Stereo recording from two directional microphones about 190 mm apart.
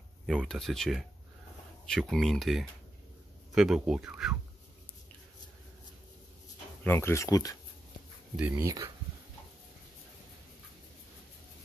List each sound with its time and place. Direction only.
0.3 s speech: centre (ahead or behind)
6.8 s speech: 10° left (ahead or behind)
8.4 s speech: 10° right (ahead or behind)